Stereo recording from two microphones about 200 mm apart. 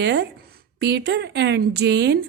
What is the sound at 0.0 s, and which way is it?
Speech, 60° right (ahead or behind).